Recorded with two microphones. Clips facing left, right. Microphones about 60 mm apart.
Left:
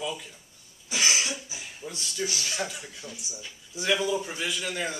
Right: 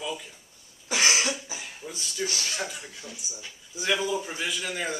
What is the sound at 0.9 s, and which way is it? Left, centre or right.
Cough, right.